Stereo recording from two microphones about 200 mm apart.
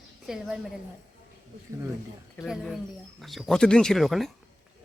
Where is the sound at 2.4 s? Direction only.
Centre (ahead or behind).